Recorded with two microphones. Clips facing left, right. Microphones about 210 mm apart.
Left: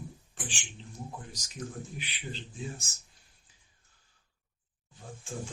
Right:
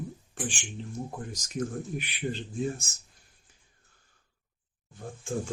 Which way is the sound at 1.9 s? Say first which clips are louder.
Right 9 dB; 55° right (ahead or behind).